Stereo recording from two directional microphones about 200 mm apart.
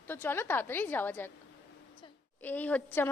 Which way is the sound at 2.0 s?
25° left (ahead or behind).